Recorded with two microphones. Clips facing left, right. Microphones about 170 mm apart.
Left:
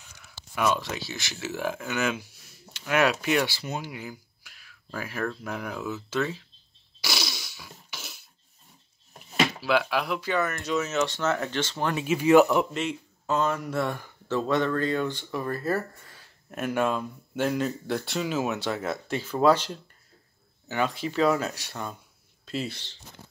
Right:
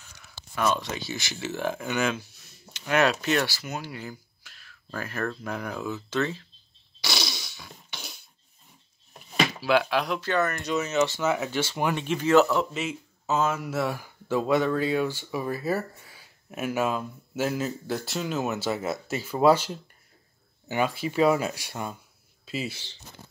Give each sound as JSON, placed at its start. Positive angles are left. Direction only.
{"t": 0.0, "sound": "speech", "side_deg": 5}
{"t": 3.4, "sound": "speech", "side_deg": 25}
{"t": 3.9, "sound": "speech", "side_deg": 10}
{"t": 7.0, "sound": "fart", "side_deg": 5}
{"t": 9.3, "sound": "speech", "side_deg": 0}
{"t": 11.9, "sound": "speech", "side_deg": 5}
{"t": 12.7, "sound": "speech", "side_deg": -5}